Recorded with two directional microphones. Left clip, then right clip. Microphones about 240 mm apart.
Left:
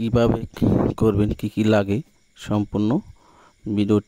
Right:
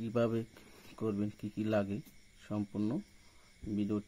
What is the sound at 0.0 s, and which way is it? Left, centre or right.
Speech, left.